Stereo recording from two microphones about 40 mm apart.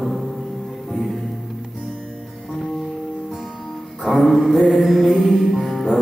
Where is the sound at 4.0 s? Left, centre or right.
Centre.